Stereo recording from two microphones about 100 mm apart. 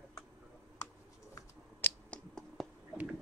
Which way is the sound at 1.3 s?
20° left (ahead or behind).